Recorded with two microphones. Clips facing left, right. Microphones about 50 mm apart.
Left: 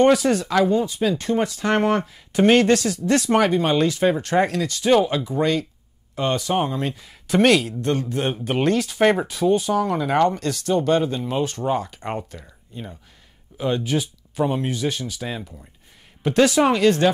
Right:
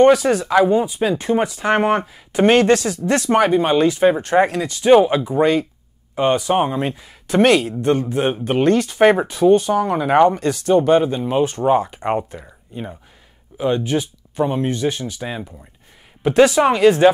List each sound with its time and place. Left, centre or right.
0.0 s speech: centre
0.6 s speech: centre
7.0 s speech: centre
9.8 s speech: centre
13.6 s speech: centre